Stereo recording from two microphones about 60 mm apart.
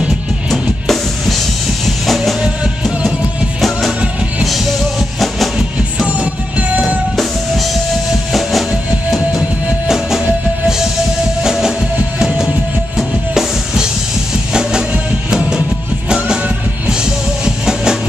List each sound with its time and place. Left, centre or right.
0.5 s music: centre
4.5 s music: centre
6.0 s music: right
7.2 s music: centre
9.8 s music: centre
11.4 s music: centre
12.9 s drum kit: centre
14.5 s music: centre